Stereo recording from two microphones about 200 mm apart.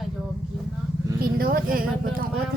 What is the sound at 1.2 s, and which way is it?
Speech, 45° right (ahead or behind).